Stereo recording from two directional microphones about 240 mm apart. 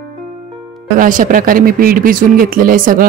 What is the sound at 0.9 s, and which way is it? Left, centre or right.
Speech, right.